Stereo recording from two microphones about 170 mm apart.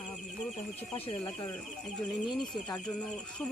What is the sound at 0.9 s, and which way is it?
Speech, 30° left (ahead or behind).